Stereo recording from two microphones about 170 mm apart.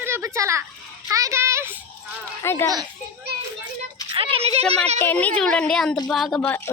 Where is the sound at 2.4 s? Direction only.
15° left (ahead or behind).